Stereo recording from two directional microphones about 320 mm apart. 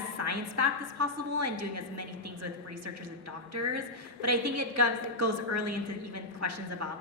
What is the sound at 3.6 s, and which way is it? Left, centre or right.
A woman's voice, right.